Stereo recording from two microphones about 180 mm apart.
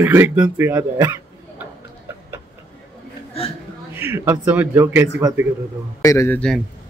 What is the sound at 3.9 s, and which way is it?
A man's voice, 15° right (ahead or behind).